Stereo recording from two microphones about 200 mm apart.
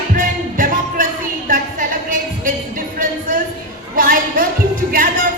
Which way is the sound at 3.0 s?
45° right (ahead or behind).